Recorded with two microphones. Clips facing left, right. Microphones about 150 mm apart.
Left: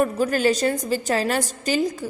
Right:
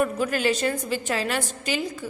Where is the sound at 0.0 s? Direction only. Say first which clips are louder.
Left 3 dB; 40° left (ahead or behind).